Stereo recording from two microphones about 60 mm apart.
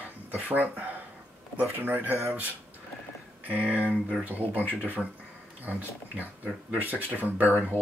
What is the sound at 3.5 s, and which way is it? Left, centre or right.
Speech, right.